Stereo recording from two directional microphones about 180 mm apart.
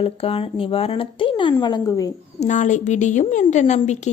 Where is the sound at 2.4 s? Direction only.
40° left (ahead or behind).